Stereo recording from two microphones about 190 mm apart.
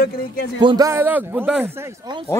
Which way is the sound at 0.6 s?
20° right (ahead or behind).